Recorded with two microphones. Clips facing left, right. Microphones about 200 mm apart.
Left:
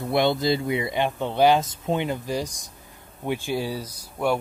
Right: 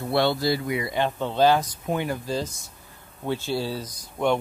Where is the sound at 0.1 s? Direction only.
20° left (ahead or behind).